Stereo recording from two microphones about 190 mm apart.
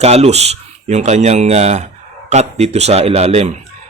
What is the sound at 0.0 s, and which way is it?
A man's voice, 35° right (ahead or behind).